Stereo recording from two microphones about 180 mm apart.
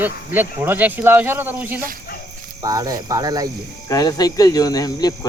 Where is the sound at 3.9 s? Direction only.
20° left (ahead or behind).